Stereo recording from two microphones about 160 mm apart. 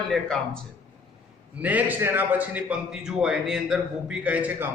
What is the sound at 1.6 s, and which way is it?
Speech, 10° right (ahead or behind).